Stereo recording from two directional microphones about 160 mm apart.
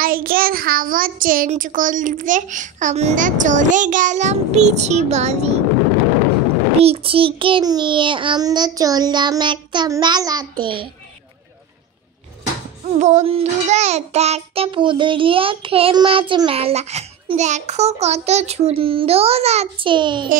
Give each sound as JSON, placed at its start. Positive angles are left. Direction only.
{"t": 0.0, "sound": "child singing", "side_deg": -65}
{"t": 1.5, "sound": "a child's voice", "side_deg": -55}
{"t": 6.8, "sound": "child singing", "side_deg": -35}
{"t": 13.0, "sound": "child singing", "side_deg": -45}